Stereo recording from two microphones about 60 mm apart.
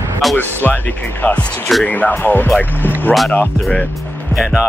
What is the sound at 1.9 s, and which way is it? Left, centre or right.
Speech, left.